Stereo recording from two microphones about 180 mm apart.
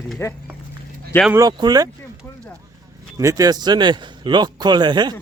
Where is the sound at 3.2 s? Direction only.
20° right (ahead or behind).